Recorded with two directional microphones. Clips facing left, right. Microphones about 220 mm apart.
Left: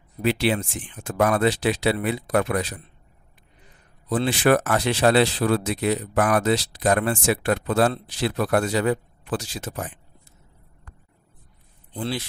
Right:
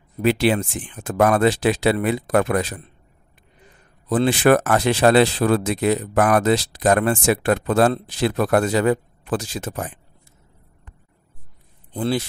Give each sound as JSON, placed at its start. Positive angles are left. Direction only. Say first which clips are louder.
{"t": 0.3, "sound": "speech", "louder": "right 4 dB", "side_deg": -45}
{"t": 4.1, "sound": "speech", "louder": "right 4 dB", "side_deg": -50}
{"t": 11.9, "sound": "speech", "louder": "right 6 dB", "side_deg": -50}